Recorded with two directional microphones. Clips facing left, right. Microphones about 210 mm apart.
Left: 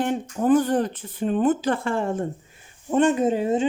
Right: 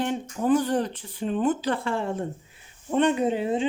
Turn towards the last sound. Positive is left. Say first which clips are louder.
# left 3 dB
turn(degrees=45)  # may be behind; listen again after turning